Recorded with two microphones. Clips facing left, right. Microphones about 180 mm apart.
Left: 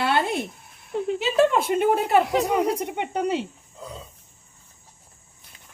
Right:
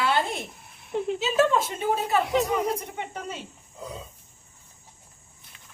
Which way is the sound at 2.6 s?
70° left (ahead or behind).